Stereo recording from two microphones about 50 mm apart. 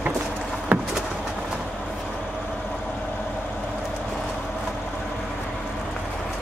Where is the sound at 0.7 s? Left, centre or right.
Right.